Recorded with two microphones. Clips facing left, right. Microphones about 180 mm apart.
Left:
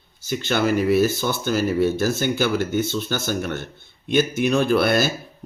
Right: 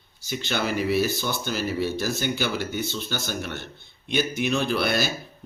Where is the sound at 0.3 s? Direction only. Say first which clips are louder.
Left 6 dB; 50° left (ahead or behind).